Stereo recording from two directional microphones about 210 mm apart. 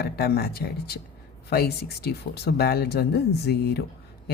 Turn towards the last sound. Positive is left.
turn(degrees=50)  # may be behind; listen again after turning